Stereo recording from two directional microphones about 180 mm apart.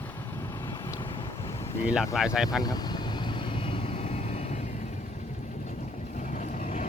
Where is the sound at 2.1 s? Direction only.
5° right (ahead or behind).